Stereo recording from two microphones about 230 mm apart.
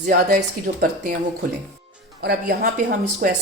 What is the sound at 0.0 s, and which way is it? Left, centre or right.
Speech, right.